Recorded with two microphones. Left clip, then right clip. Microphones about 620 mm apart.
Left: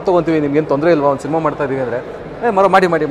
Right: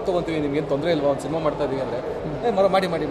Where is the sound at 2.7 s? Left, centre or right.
Left.